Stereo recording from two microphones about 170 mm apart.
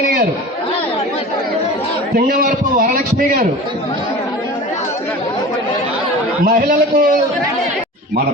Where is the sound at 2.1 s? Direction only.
60° right (ahead or behind).